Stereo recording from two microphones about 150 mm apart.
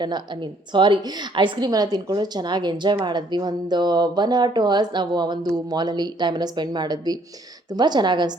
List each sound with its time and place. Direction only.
0.7 s a woman's voice: 30° right (ahead or behind)